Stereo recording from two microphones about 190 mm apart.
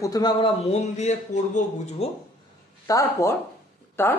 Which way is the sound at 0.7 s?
35° left (ahead or behind).